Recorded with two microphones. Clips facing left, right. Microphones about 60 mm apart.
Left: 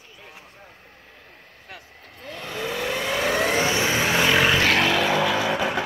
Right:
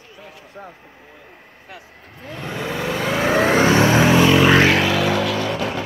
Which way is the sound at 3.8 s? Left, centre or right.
Right.